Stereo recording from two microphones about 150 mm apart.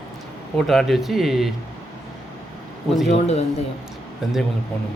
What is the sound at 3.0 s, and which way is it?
Speech, 45° left (ahead or behind).